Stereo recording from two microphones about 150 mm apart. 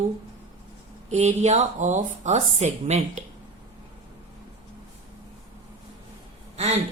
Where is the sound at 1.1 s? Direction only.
50° right (ahead or behind).